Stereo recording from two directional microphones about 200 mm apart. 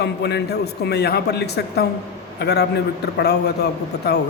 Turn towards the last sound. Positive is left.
turn(degrees=55)  # may be behind; listen again after turning